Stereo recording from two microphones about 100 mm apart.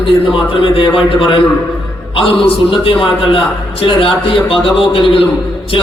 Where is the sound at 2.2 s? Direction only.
65° left (ahead or behind).